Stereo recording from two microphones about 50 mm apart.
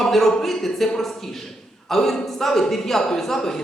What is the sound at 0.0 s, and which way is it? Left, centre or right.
A man's voice, centre.